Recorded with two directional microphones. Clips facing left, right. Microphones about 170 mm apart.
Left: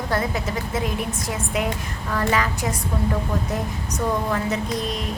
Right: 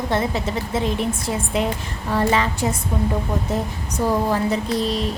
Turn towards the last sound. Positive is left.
turn(degrees=-30)  # may be behind; listen again after turning